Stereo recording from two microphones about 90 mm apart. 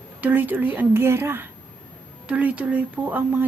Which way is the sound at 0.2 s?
20° right (ahead or behind).